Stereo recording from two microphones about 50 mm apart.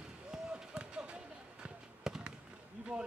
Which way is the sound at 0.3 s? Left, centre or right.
Centre.